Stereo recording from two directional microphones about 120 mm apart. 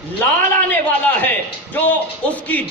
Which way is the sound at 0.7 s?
15° left (ahead or behind).